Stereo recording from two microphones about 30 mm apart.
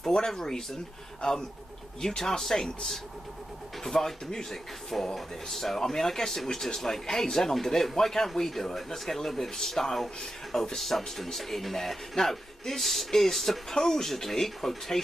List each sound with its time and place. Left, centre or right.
0.3 s speech: centre
5.1 s speech: centre